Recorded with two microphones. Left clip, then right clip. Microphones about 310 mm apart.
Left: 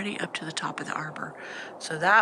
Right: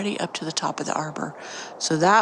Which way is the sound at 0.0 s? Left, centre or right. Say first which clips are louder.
Right 4 dB; centre.